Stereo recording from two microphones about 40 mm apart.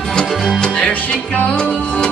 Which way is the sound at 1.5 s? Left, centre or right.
Left.